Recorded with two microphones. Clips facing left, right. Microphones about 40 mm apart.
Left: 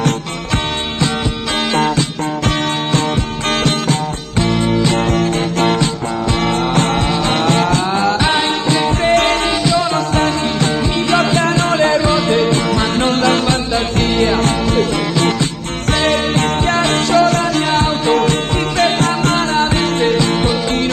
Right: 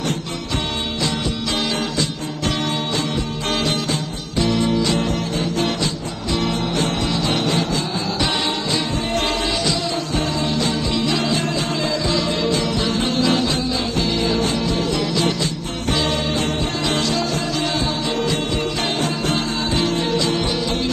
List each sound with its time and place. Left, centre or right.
5.6 s music: left
7.0 s music: left
9.0 s music: left
17.4 s music: left
18.8 s music: left
19.5 s music: left